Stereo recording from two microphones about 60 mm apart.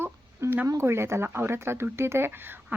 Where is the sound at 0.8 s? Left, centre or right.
Right.